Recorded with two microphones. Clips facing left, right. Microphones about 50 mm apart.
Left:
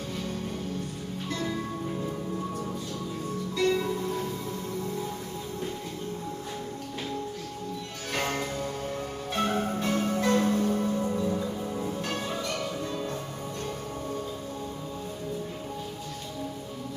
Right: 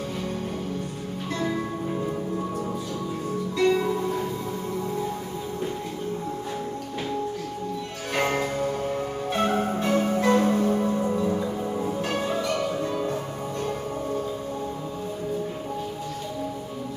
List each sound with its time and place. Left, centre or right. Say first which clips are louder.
1.3 s music: right 5 dB; centre
3.5 s music: right 4 dB; centre
8.1 s music: right 5 dB; centre